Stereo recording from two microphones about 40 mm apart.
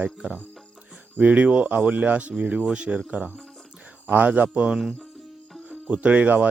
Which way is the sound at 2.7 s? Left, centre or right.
Right.